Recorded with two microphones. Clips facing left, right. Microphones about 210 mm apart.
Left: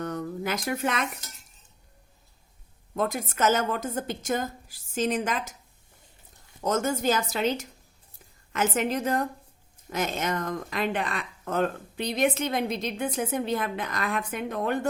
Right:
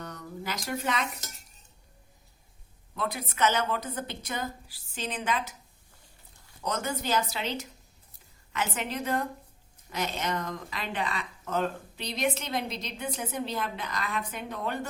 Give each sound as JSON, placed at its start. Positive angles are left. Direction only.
{"t": 0.0, "sound": "a sound", "side_deg": 50}
{"t": 2.9, "sound": "speech", "side_deg": 45}
{"t": 6.6, "sound": "speech", "side_deg": 45}